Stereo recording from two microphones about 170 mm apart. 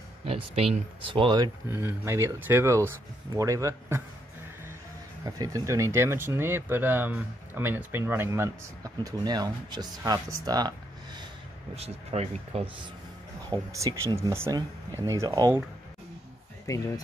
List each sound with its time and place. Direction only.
0.2 s a sound: 35° right (ahead or behind)
0.7 s speech: 30° right (ahead or behind)
5.2 s speech: 20° right (ahead or behind)
11.7 s speech: 40° right (ahead or behind)
13.5 s speech: 20° right (ahead or behind)
16.6 s speech: 20° left (ahead or behind)